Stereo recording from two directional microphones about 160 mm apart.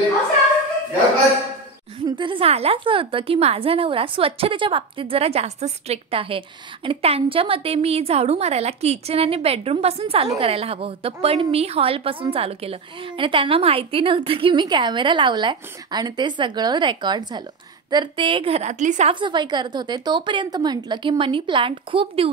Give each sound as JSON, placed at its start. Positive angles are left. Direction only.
{"t": 2.1, "sound": "a woman's voice", "side_deg": -30}
{"t": 19.1, "sound": "a woman's voice", "side_deg": -30}